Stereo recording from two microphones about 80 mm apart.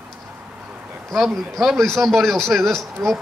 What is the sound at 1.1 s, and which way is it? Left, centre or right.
A man's voice, centre.